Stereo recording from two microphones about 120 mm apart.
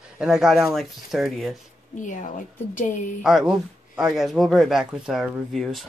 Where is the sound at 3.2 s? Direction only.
5° right (ahead or behind).